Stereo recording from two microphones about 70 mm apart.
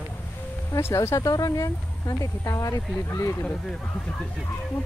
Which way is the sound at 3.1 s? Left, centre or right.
Left.